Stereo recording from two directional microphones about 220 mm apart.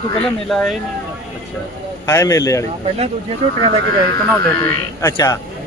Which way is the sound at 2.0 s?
15° left (ahead or behind).